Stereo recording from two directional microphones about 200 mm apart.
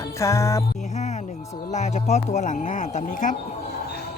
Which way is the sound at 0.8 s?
35° left (ahead or behind).